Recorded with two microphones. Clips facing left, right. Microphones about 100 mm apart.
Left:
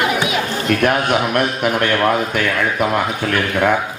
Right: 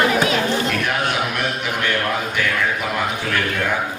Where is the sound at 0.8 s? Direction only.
50° left (ahead or behind).